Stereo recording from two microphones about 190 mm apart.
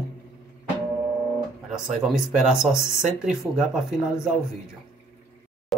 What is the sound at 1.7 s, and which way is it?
Speech, 5° right (ahead or behind).